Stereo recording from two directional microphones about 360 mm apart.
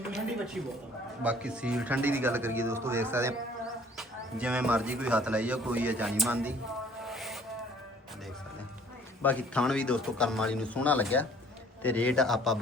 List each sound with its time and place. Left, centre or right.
1.2 s a man's voice: centre
7.0 s a sound: centre
9.2 s a man's voice: centre